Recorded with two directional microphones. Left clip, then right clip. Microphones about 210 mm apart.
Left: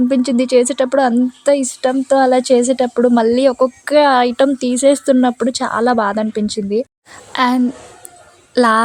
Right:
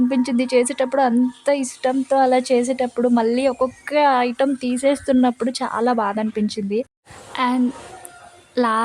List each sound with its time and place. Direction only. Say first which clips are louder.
0.1 s a woman's voice: left 5 dB; 15° left (ahead or behind)
7.3 s a woman's voice: left 6 dB; 25° left (ahead or behind)
8.5 s female singing: left 7 dB; 25° left (ahead or behind)